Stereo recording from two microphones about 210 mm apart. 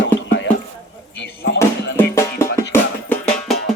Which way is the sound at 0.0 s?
60° left (ahead or behind).